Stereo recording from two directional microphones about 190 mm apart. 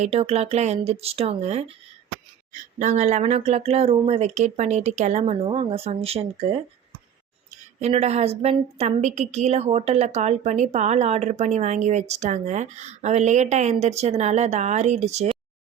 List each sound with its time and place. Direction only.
0.0 s a woman's voice: 35° right (ahead or behind)
7.8 s a woman's voice: 35° right (ahead or behind)